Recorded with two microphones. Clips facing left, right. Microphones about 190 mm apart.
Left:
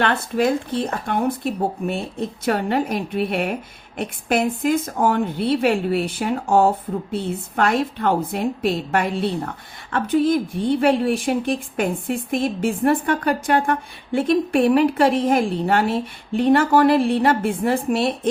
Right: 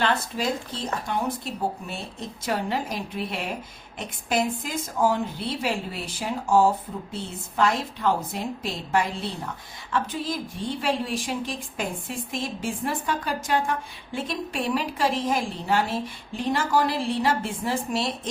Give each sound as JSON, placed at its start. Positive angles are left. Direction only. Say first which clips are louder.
{"t": 0.0, "sound": "a woman's voice", "louder": "left 6 dB", "side_deg": 60}